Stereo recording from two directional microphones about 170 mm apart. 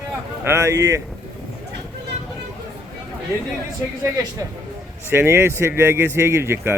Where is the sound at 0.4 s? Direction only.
15° right (ahead or behind).